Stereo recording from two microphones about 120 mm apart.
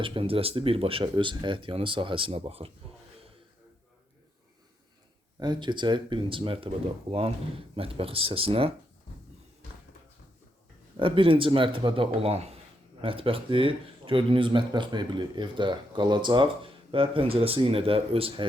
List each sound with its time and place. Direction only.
0.0 s speech: 45° right (ahead or behind)
5.4 s speech: 40° right (ahead or behind)
10.9 s speech: 45° right (ahead or behind)